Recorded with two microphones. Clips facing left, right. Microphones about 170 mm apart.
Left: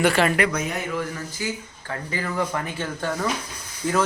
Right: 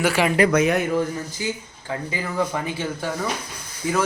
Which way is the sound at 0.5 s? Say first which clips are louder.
Right 9 dB; 70° right (ahead or behind).